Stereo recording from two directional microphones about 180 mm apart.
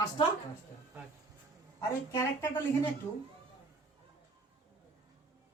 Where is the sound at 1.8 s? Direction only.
15° left (ahead or behind).